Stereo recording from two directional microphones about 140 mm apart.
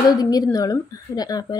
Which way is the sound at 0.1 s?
25° left (ahead or behind).